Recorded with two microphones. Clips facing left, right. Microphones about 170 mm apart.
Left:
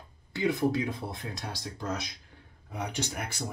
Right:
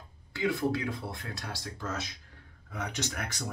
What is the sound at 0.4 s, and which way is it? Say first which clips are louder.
Speech: left 2 dB; 20° left (ahead or behind).